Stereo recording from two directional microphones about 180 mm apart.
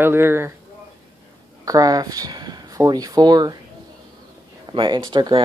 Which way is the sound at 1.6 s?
20° right (ahead or behind).